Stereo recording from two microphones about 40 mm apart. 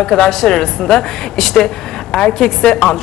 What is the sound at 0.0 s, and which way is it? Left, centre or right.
A woman's voice, centre.